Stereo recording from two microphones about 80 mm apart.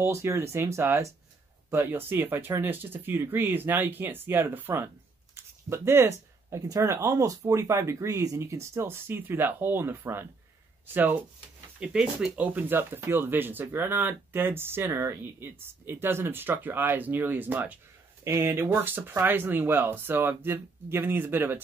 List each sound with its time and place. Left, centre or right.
0.0 s speech: right
11.8 s speech: centre
18.2 s speech: right